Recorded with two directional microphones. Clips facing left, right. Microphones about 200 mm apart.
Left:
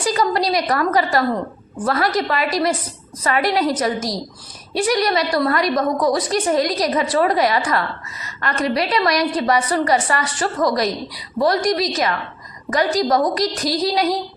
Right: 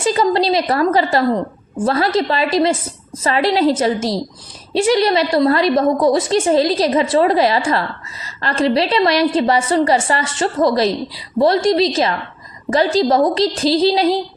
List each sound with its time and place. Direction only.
0.0 s a woman's voice: 25° right (ahead or behind)